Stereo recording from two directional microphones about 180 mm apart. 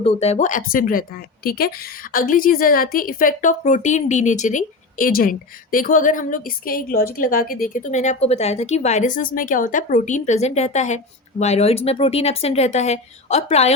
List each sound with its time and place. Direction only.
0.0 s a woman's voice: 35° left (ahead or behind)